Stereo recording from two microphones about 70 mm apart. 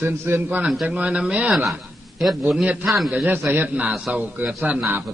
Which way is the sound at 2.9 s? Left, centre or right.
Centre.